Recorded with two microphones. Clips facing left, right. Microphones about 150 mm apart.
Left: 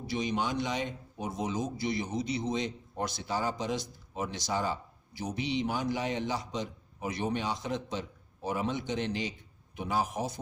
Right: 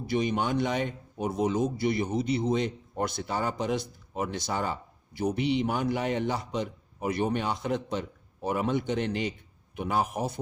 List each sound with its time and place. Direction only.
0.1 s a man's voice: 55° right (ahead or behind)